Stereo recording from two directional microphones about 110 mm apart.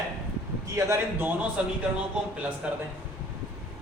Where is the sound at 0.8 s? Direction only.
25° right (ahead or behind).